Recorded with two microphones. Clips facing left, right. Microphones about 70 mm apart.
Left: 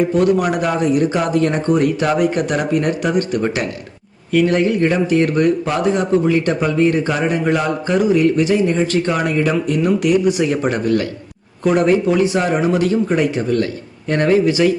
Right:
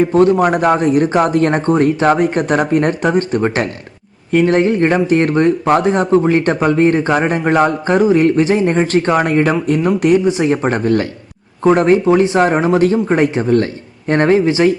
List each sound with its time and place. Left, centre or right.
0.1 s speech: right